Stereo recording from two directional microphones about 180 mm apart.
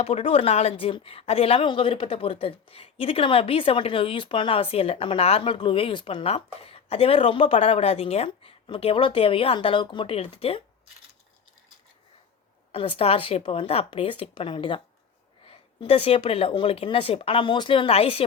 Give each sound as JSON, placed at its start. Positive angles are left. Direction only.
{"t": 0.0, "sound": "a woman's voice", "side_deg": 35}
{"t": 13.0, "sound": "a woman's voice", "side_deg": 30}